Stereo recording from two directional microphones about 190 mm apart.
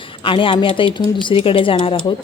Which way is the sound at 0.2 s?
25° left (ahead or behind).